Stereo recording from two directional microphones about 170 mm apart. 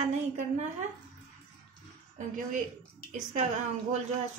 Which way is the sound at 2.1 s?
45° right (ahead or behind).